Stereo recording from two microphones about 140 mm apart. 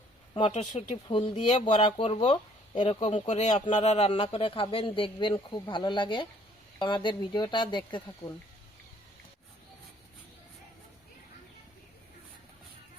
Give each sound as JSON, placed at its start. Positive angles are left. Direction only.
{"t": 1.0, "sound": "speech", "side_deg": 40}
{"t": 2.8, "sound": "speech", "side_deg": 50}
{"t": 3.2, "sound": "speech", "side_deg": 55}